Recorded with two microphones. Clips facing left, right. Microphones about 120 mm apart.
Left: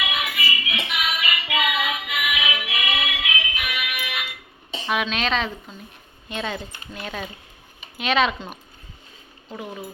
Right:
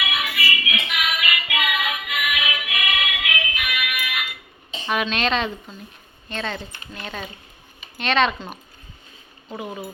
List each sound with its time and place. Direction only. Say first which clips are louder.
0.3 s music: right 2 dB; 20° left (ahead or behind)
4.9 s a woman's voice: right 1 dB; centre (ahead or behind)